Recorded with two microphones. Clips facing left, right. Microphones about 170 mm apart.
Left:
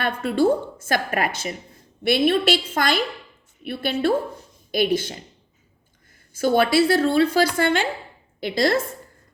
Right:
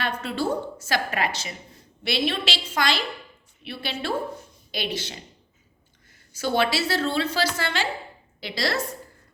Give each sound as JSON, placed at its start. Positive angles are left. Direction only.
{"t": 0.0, "sound": "a woman's voice", "side_deg": 50}
{"t": 6.3, "sound": "a woman's voice", "side_deg": 50}